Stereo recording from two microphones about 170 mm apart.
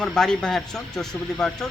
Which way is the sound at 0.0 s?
5° left (ahead or behind).